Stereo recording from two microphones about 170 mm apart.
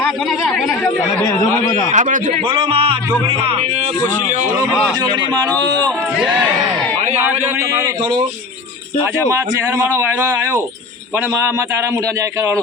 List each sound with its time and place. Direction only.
1.2 s a man's voice: 15° left (ahead or behind)
1.9 s speech: 45° right (ahead or behind)
2.5 s speech: 30° right (ahead or behind)
5.0 s speech: 25° right (ahead or behind)
7.2 s speech: 15° right (ahead or behind)
9.3 s speech: 15° right (ahead or behind)